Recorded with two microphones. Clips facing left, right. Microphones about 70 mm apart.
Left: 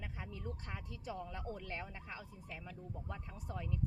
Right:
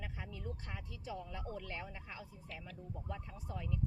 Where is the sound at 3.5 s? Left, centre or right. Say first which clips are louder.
Even; left.